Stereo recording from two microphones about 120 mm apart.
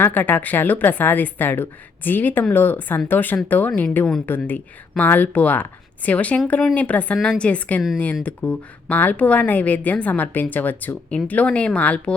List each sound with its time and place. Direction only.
0.0 s speech: 15° left (ahead or behind)